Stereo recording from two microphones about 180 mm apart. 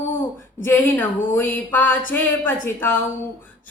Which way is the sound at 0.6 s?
10° left (ahead or behind).